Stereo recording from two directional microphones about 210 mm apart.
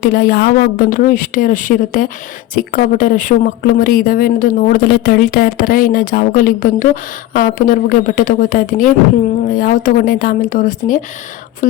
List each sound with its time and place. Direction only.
0.0 s speech: 45° left (ahead or behind)